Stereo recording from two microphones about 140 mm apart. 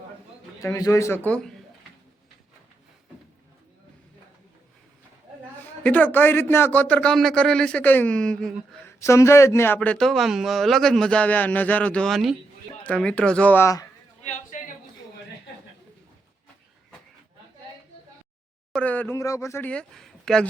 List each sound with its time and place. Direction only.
0.6 s a man's voice: 25° left (ahead or behind); by 1.5 s 5° left (ahead or behind)
5.8 s a man's voice: 10° left (ahead or behind)
9.0 s a man's voice: 20° left (ahead or behind)
14.3 s a sound: 65° left (ahead or behind)
18.7 s a man's voice: 10° left (ahead or behind)
19.7 s speech: 5° left (ahead or behind)